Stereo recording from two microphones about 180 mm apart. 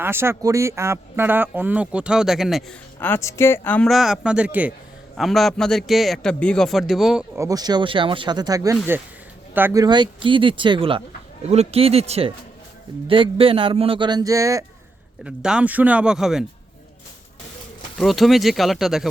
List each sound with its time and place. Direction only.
0.0 s speech: 15° right (ahead or behind)
3.0 s a man's voice: 15° left (ahead or behind); by 7.3 s centre (ahead or behind)
7.3 s speech: 20° right (ahead or behind)
9.8 s speech: 25° right (ahead or behind)
15.2 s a man's voice: 5° right (ahead or behind)
17.9 s a man's voice: centre (ahead or behind)